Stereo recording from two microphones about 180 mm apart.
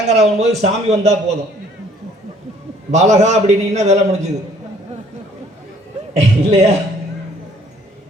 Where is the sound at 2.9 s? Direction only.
40° right (ahead or behind).